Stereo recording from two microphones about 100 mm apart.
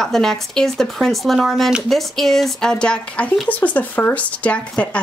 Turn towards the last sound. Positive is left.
turn(degrees=10)  # may be behind; listen again after turning